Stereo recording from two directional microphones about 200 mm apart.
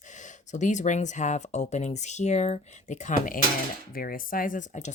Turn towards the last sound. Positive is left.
turn(degrees=40)  # may be behind; listen again after turning